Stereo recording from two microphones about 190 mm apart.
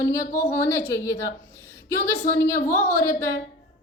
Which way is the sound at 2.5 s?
45° left (ahead or behind).